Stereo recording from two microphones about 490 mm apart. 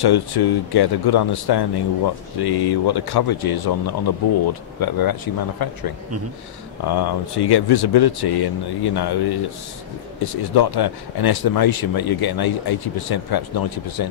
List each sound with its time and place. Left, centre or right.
0.0 s speech: left
6.9 s speech: left